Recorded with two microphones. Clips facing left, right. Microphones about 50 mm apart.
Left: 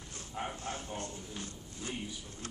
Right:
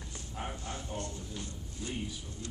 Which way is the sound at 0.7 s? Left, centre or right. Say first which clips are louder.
Even; left.